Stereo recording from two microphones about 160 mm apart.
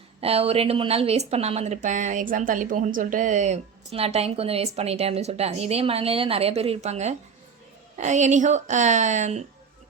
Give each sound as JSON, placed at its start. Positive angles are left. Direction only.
{"t": 0.2, "sound": "a woman's voice", "side_deg": -40}